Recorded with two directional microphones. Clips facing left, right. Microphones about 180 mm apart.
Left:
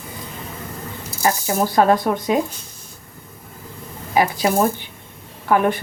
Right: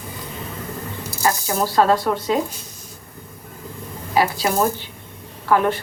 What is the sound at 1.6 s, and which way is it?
Speech, 15° left (ahead or behind).